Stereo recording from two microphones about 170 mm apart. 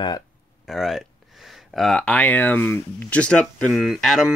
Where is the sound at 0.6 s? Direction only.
Centre (ahead or behind).